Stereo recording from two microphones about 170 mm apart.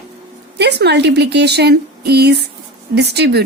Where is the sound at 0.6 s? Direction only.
85° right.